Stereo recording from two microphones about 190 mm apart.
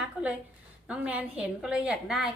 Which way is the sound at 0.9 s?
5° right (ahead or behind).